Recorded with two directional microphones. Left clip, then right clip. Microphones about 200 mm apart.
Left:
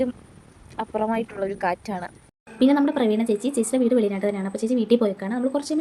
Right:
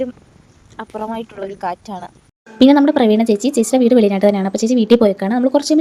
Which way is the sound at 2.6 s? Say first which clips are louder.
Right 9 dB; 35° right (ahead or behind).